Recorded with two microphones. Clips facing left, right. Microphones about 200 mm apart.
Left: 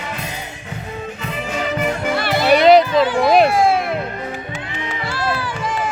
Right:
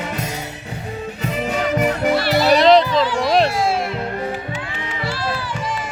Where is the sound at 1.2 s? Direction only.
40° right (ahead or behind).